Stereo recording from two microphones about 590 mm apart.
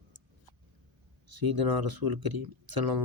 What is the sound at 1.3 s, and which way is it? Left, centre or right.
Speech, right.